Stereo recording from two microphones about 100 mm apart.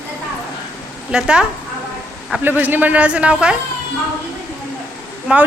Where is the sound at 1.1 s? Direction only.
10° right (ahead or behind).